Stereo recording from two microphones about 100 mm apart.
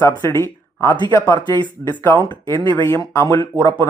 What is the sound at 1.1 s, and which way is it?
Speech, 45° left (ahead or behind).